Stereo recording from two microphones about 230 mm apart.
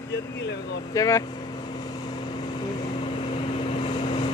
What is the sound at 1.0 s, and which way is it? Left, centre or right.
Speech, centre.